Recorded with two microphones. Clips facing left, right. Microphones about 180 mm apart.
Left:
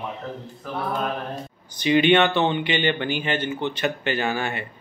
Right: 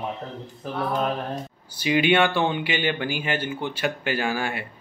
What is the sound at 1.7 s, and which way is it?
Speech, 10° right (ahead or behind).